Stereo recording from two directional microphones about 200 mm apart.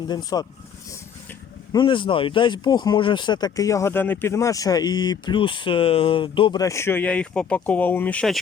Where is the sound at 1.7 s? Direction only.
25° left (ahead or behind).